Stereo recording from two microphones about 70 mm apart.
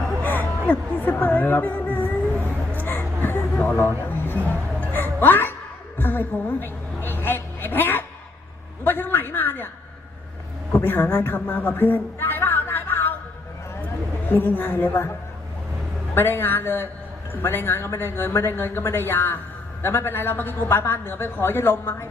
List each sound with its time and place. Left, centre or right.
0.2 s music: left
2.7 s a sound: left
3.8 s speech: left
4.8 s music: left
6.0 s a sound: left
8.8 s a man's voice: left
10.7 s a sound: left
14.3 s speech: left
16.1 s speech: left